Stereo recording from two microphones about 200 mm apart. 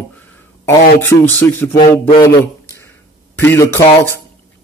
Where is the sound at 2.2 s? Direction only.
10° left (ahead or behind).